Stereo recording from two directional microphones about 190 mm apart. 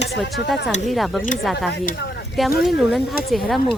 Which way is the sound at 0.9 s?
Centre (ahead or behind).